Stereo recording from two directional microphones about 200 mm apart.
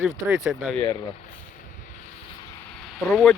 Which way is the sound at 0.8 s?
20° left (ahead or behind).